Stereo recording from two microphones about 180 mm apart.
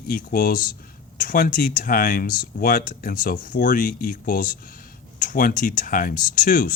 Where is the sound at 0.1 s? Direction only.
50° left (ahead or behind).